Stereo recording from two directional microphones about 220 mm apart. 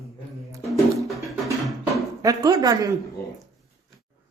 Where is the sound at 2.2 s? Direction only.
15° right (ahead or behind).